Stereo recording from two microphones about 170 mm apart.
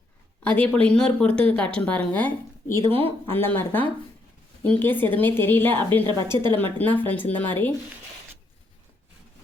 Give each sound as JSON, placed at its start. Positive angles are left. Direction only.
{"t": 0.4, "sound": "a woman's voice", "side_deg": 10}
{"t": 6.2, "sound": "a woman's voice", "side_deg": -25}
{"t": 6.6, "sound": "a woman's voice", "side_deg": 10}